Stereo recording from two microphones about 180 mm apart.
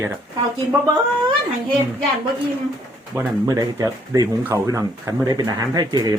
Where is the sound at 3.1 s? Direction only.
20° right (ahead or behind).